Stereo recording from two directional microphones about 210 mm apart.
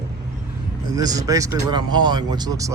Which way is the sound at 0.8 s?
20° right (ahead or behind).